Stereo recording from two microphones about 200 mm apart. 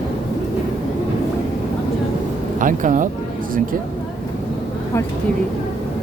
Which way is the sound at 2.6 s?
40° right (ahead or behind).